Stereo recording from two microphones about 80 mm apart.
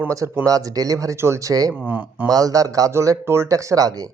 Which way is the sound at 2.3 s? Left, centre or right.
Right.